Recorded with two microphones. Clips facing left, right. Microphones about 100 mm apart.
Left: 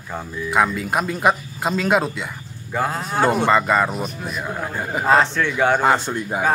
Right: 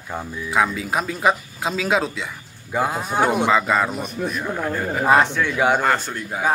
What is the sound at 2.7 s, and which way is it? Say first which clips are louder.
Speech: right 1 dB; 10° right (ahead or behind).